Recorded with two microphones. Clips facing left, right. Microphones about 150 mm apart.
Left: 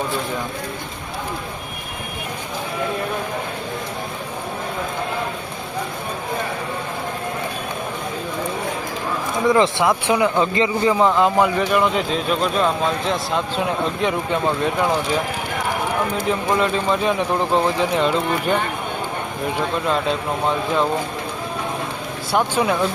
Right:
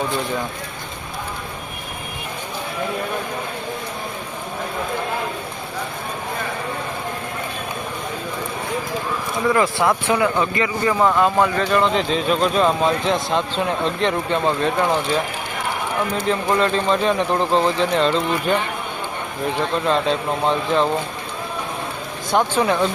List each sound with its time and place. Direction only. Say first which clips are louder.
9.5 s speech: left 1 dB; 15° left (ahead or behind)
10.4 s speech: left 2 dB; 25° left (ahead or behind); by 15.2 s 10° left (ahead or behind)
16.3 s speech: right 2 dB; 10° left (ahead or behind)
22.3 s speech: right 1 dB; 5° left (ahead or behind)